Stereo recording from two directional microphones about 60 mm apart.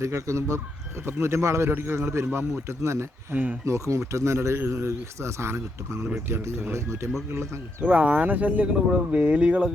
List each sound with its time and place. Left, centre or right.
0.0 s speech: right
7.9 s speech: right